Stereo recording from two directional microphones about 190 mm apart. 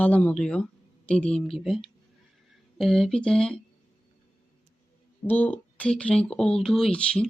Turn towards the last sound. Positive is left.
turn(degrees=5)  # may be behind; listen again after turning